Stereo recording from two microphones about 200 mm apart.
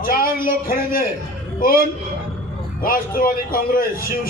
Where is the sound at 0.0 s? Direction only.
45° left (ahead or behind).